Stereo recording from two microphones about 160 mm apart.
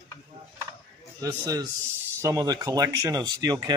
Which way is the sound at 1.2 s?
20° right (ahead or behind).